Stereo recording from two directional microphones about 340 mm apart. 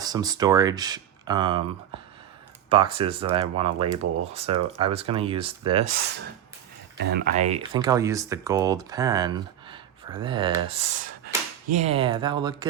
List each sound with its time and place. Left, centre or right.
0.0 s speech: centre
5.8 s speech: right; by 12.6 s centre